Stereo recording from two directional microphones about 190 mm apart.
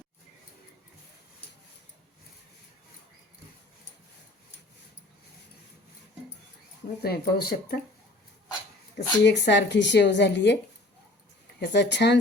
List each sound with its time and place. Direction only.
7.0 s speech: 55° left (ahead or behind)
9.0 s speech: 60° left (ahead or behind)
11.7 s speech: 65° left (ahead or behind)